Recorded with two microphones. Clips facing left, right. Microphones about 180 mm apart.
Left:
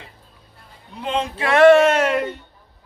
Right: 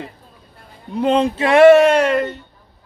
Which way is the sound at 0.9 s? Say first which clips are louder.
Right 9 dB; 40° right (ahead or behind).